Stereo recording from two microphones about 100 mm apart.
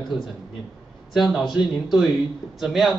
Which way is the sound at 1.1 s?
Centre (ahead or behind).